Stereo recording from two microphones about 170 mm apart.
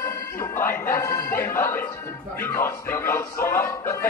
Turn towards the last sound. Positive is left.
turn(degrees=10)  # may be behind; listen again after turning